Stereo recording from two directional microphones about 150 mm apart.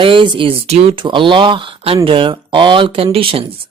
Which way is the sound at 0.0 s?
35° right (ahead or behind).